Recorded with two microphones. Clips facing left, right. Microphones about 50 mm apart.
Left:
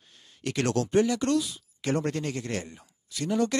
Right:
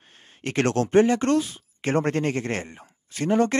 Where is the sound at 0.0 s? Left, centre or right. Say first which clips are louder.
Right 2 dB; right.